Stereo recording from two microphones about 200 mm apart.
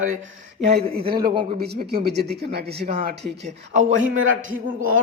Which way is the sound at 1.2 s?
25° right (ahead or behind).